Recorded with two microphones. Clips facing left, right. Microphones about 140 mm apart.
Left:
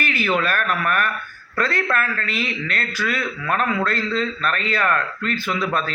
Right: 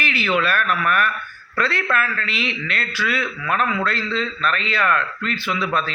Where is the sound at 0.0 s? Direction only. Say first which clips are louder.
Even; 45° left (ahead or behind).